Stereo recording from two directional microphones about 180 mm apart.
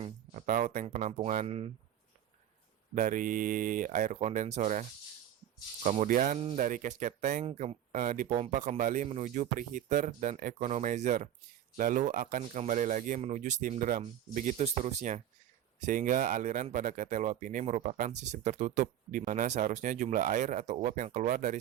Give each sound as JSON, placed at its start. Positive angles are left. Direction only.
{"t": 0.0, "sound": "a sound", "side_deg": -40}
{"t": 0.9, "sound": "speech", "side_deg": -40}
{"t": 2.9, "sound": "speech", "side_deg": -45}